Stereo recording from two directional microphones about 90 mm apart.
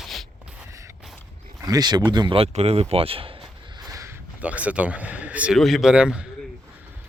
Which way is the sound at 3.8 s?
40° right (ahead or behind).